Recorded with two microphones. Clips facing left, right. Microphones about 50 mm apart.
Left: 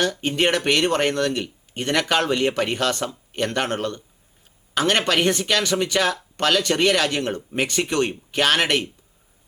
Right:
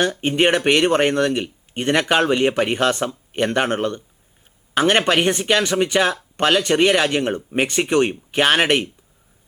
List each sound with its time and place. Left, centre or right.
0.0 s speech: right